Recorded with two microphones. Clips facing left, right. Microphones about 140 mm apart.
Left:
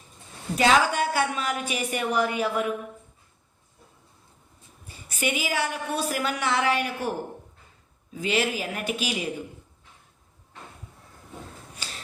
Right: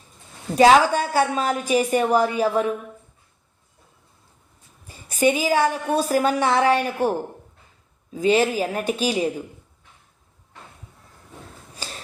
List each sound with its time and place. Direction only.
0.5 s a woman's voice: 40° right (ahead or behind)
4.9 s a woman's voice: 40° right (ahead or behind)